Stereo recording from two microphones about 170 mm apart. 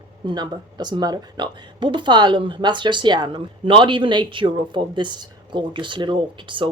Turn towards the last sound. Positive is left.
turn(degrees=-30)  # may be behind; listen again after turning